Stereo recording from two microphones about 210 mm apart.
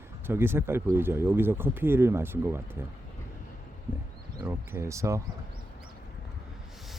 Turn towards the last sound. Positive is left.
turn(degrees=-15)  # may be behind; listen again after turning